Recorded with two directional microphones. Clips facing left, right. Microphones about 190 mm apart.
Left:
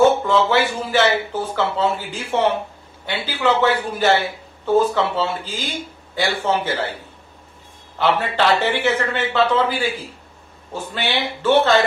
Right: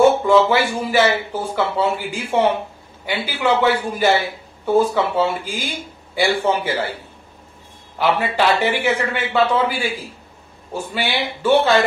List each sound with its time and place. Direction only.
0.3 s speech: 10° right (ahead or behind)
8.0 s speech: 10° right (ahead or behind)